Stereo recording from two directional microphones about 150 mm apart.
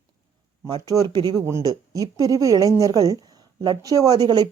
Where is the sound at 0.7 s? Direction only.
30° right (ahead or behind).